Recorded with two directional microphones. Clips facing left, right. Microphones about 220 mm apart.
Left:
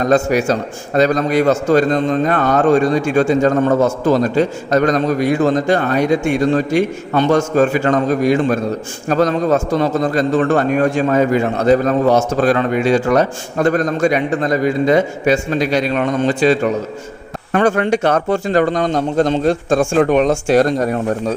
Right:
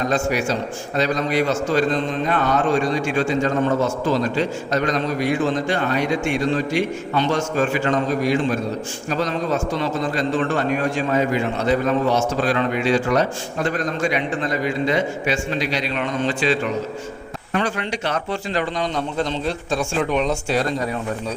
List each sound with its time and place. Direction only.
0.1 s a man's voice: 45° left (ahead or behind)